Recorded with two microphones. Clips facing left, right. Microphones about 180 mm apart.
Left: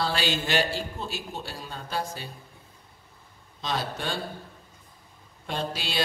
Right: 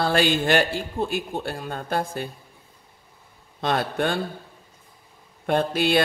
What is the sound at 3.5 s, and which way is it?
Speech, 55° right (ahead or behind).